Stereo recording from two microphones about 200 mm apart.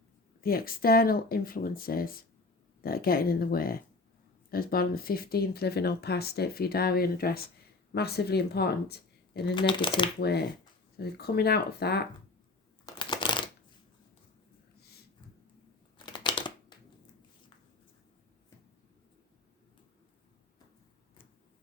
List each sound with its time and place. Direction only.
0.4 s speech: 50° left (ahead or behind)
9.3 s speech: 25° left (ahead or behind)
10.2 s speech: 55° left (ahead or behind)
12.8 s shuffling cards: 25° left (ahead or behind)
16.0 s a sound: 20° left (ahead or behind)